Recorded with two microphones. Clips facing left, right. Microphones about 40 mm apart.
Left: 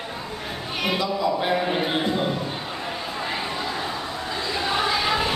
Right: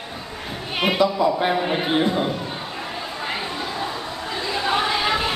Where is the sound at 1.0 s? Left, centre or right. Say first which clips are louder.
Right 7 dB; right.